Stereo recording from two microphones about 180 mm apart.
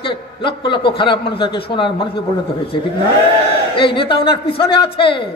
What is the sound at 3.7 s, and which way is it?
A man's voice, 30° left (ahead or behind).